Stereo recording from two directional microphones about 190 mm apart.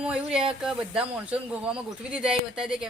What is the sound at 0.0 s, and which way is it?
Speech, 5° right (ahead or behind).